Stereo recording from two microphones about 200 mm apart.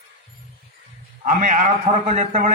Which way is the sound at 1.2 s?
40° right (ahead or behind).